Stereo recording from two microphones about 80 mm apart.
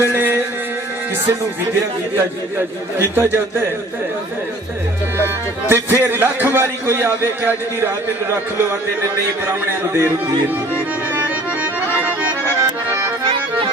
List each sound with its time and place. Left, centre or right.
0.0 s a sound: right
2.1 s speech: right
5.1 s speech: right
9.9 s speech: right